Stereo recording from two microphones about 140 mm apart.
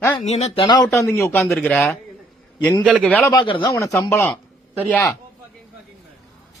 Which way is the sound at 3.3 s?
35° left (ahead or behind).